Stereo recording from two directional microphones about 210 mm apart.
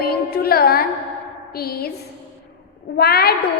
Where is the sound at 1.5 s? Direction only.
45° left (ahead or behind).